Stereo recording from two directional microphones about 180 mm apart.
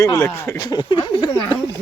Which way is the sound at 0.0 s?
15° left (ahead or behind).